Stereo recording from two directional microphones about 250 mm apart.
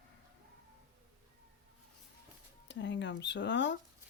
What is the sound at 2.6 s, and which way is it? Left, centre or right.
Speech, left.